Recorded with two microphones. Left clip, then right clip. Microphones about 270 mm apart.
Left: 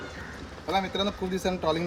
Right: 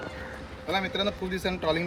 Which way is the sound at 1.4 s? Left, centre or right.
Centre.